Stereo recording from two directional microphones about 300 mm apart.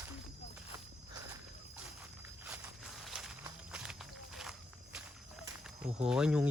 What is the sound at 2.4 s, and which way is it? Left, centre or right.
Walk, centre.